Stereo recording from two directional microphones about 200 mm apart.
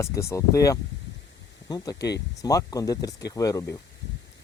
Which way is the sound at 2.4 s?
15° left (ahead or behind).